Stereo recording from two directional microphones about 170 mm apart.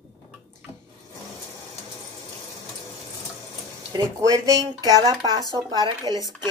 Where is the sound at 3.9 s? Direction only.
20° right (ahead or behind).